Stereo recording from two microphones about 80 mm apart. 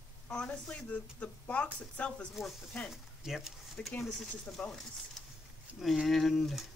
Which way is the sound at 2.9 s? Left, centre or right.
Centre.